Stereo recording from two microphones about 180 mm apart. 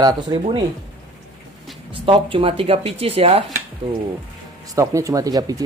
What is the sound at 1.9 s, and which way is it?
Speech, 30° right (ahead or behind).